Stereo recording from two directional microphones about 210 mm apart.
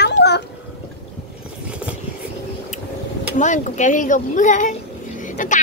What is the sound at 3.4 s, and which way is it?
A woman's voice, 35° left (ahead or behind).